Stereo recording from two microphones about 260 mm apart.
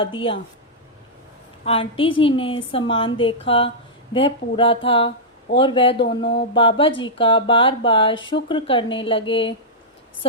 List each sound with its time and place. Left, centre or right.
0.0 s speech: centre
1.6 s speech: left